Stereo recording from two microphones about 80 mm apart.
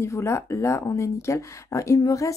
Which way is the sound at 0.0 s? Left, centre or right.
Left.